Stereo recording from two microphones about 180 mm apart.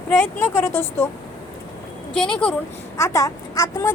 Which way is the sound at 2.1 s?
5° left (ahead or behind).